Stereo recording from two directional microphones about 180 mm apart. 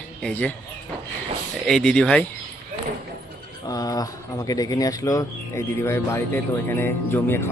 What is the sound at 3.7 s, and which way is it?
Speech, 20° left (ahead or behind).